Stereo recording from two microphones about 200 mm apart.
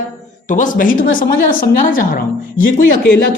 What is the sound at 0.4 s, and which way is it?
A woman's voice, 40° left (ahead or behind).